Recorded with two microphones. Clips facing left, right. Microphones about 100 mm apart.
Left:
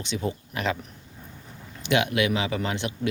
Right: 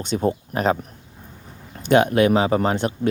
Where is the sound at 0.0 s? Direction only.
45° right (ahead or behind).